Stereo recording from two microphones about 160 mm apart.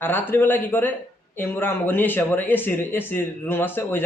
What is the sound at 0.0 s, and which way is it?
Speech, 10° left (ahead or behind).